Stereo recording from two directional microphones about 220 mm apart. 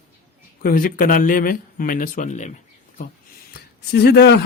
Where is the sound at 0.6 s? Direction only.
40° left (ahead or behind).